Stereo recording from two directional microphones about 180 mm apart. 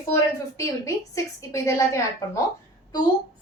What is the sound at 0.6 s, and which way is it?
A woman's voice, 15° left (ahead or behind).